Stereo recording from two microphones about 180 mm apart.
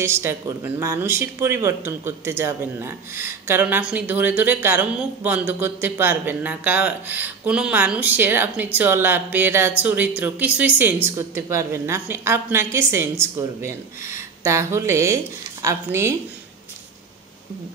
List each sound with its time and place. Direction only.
0.0 s speech: 15° right (ahead or behind)